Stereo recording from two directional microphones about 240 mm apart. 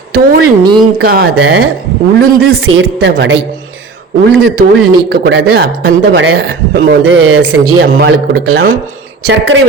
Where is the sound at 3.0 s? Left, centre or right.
Right.